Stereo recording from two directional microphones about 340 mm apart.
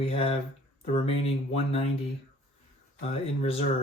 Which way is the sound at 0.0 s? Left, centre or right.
Centre.